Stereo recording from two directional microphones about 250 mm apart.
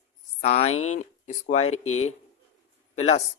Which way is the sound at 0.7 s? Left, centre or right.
Left.